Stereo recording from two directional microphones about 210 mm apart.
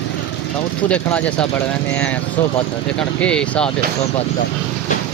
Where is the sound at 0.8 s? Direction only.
5° left (ahead or behind).